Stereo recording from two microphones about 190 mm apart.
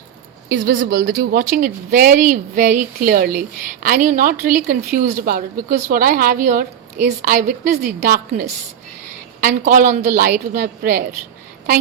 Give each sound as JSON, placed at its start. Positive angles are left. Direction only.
{"t": 0.4, "sound": "a woman's voice", "side_deg": -65}